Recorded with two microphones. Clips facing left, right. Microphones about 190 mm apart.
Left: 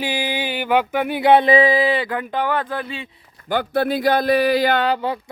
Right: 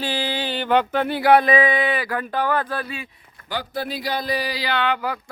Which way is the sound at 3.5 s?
60° left (ahead or behind).